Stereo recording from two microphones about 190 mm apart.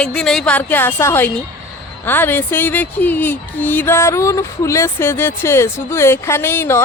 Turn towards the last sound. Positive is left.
turn(degrees=10)  # may be behind; listen again after turning